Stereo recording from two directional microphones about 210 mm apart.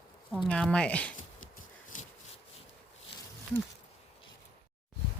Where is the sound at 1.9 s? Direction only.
40° left (ahead or behind).